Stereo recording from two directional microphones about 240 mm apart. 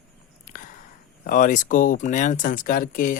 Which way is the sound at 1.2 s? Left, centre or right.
Left.